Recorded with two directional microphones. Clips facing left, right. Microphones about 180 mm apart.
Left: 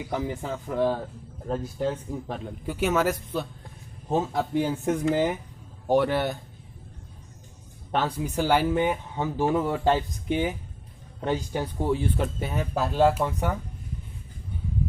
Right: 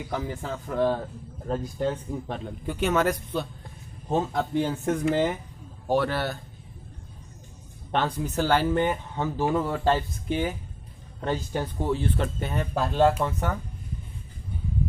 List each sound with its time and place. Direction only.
0.0 s a man's voice: 15° left (ahead or behind)
7.9 s speech: 10° left (ahead or behind)